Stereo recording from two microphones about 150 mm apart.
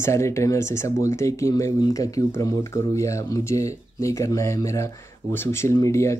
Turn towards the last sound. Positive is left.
turn(degrees=20)  # may be behind; listen again after turning